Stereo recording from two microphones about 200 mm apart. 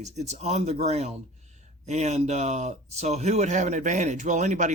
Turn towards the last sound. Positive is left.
turn(degrees=-40)  # may be behind; listen again after turning